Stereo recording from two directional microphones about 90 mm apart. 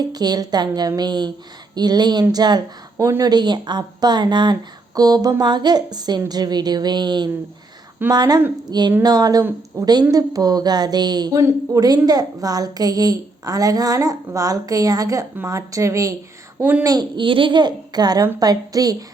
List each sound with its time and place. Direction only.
0.0 s a woman's voice: 50° right (ahead or behind)
11.3 s speech: 35° right (ahead or behind)
11.9 s a woman's voice: 45° right (ahead or behind)
16.6 s a woman's voice: 20° right (ahead or behind)
16.8 s a woman's voice: 45° right (ahead or behind)
17.2 s a woman's voice: 70° right (ahead or behind); by 19.0 s 45° right (ahead or behind)